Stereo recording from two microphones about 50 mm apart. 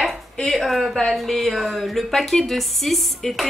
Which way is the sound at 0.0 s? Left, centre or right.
Centre.